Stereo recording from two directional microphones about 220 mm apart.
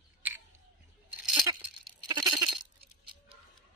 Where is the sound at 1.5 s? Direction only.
15° right (ahead or behind).